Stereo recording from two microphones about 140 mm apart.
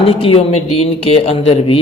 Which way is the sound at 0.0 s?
40° left (ahead or behind).